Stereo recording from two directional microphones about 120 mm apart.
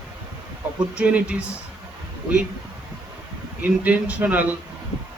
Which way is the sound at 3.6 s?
15° right (ahead or behind).